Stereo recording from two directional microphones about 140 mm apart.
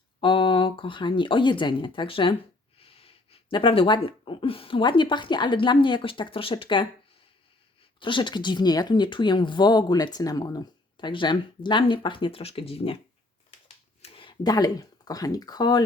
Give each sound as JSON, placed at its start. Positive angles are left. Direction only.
{"t": 0.2, "sound": "speech", "side_deg": 35}
{"t": 7.9, "sound": "speech", "side_deg": 35}
{"t": 14.0, "sound": "a sound", "side_deg": 40}
{"t": 14.4, "sound": "speech", "side_deg": 25}